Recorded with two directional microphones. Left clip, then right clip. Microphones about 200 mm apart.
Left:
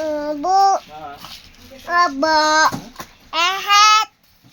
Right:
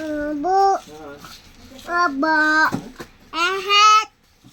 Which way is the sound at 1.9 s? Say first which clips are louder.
Left 3 dB; 15° left (ahead or behind).